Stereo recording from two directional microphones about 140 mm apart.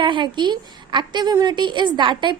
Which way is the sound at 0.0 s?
35° right (ahead or behind).